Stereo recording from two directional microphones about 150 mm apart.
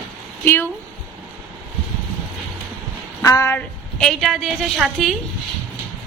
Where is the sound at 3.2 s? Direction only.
25° left (ahead or behind).